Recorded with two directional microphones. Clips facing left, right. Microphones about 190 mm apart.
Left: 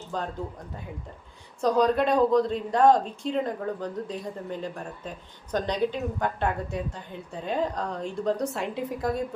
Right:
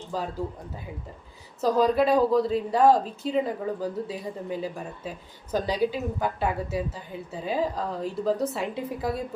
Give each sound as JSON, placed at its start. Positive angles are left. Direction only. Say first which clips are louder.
{"t": 0.1, "sound": "speech", "louder": "right 2 dB", "side_deg": -5}